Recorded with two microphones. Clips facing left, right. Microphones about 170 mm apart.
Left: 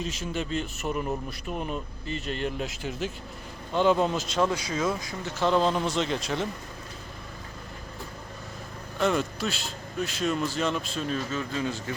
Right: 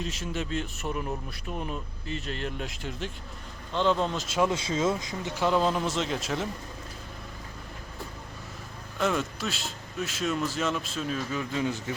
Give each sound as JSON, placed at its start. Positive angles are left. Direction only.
{"t": 0.0, "sound": "a man's voice", "side_deg": 0}
{"t": 4.4, "sound": "speech", "side_deg": -25}
{"t": 5.4, "sound": "speech", "side_deg": -5}
{"t": 9.0, "sound": "speech", "side_deg": 0}
{"t": 11.3, "sound": "speech", "side_deg": -15}